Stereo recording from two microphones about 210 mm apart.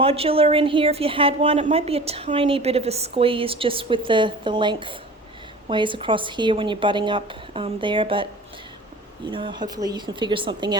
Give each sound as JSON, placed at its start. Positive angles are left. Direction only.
{"t": 0.0, "sound": "a woman's voice", "side_deg": -25}